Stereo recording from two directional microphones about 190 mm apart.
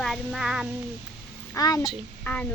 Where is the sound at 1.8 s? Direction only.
5° left (ahead or behind).